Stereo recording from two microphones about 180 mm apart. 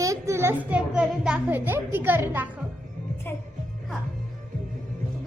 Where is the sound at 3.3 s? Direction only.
10° left (ahead or behind).